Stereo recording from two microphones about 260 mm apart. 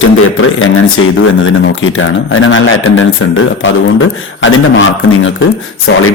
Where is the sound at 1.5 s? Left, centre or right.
Left.